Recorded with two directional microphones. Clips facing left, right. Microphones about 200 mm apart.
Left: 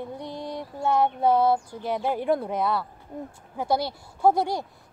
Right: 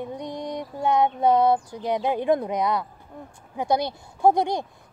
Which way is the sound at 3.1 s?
25° left (ahead or behind).